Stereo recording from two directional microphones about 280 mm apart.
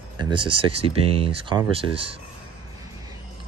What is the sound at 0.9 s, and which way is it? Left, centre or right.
Speech, centre.